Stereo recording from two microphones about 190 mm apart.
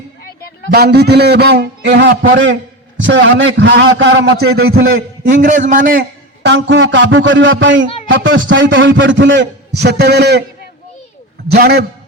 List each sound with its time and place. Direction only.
0.3 s a sound: 50° left (ahead or behind)
0.7 s a man's voice: 55° right (ahead or behind)
11.5 s a man's voice: 55° right (ahead or behind)